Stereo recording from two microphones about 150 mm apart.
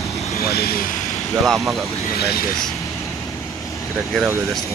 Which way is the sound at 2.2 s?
90° left.